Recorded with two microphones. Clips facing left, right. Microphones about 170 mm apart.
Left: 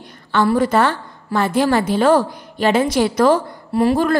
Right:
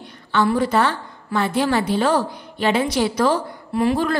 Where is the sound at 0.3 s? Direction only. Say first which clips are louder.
Left 3 dB; 50° left (ahead or behind).